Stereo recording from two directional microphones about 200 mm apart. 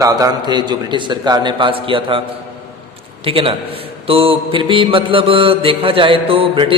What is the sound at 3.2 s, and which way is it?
Mantra, 25° right (ahead or behind).